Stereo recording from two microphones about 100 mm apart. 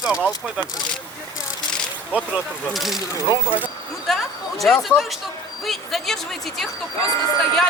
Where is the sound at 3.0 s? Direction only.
35° left (ahead or behind).